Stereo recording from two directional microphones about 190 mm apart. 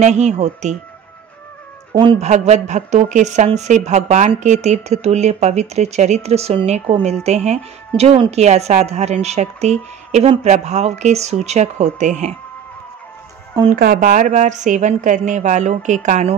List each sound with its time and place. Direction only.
0.0 s speech: 35° right (ahead or behind)
2.0 s speech: 25° right (ahead or behind)
2.2 s speech: 35° right (ahead or behind)
13.7 s speech: 50° right (ahead or behind)